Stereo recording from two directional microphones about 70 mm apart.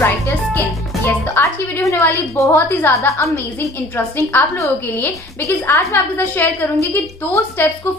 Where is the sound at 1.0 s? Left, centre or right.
Left.